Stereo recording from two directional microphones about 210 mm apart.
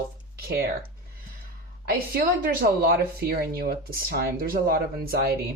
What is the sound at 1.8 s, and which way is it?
Speech, 45° right (ahead or behind).